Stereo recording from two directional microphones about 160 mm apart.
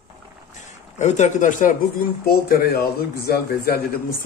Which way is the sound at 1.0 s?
50° left (ahead or behind).